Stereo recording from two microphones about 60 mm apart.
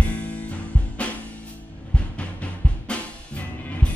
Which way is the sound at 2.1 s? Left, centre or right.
Left.